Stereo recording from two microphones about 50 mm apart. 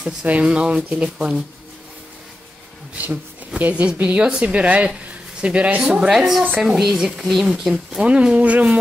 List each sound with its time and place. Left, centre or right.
0.0 s speech: right
3.0 s speech: right
5.8 s speech: centre
8.0 s speech: right
8.5 s a sound: right